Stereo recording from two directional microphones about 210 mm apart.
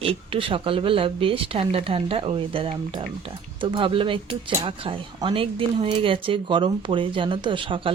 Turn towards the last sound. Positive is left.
turn(degrees=-25)  # may be behind; listen again after turning